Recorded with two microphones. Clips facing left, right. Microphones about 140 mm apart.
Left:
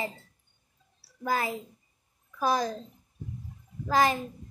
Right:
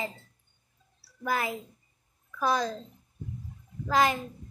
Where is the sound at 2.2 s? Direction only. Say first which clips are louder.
Left 1 dB; 20° left (ahead or behind).